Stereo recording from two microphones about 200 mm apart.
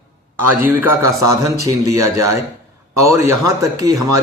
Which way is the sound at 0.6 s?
10° right (ahead or behind).